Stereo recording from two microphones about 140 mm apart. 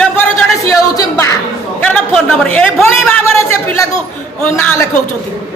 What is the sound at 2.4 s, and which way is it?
Speech, 10° left (ahead or behind).